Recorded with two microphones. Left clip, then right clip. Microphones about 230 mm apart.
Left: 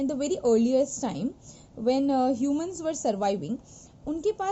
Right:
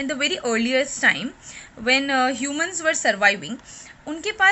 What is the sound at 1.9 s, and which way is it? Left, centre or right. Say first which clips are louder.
Speech: right 7 dB; centre.